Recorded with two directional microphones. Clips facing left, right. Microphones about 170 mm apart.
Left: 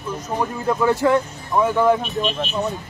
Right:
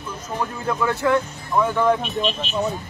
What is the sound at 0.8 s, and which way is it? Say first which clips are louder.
Speech: left 5 dB; 35° left (ahead or behind).